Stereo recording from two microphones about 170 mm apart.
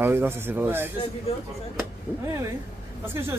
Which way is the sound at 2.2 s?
15° right (ahead or behind).